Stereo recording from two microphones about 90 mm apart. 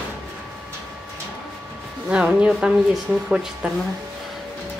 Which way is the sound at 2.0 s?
10° right (ahead or behind).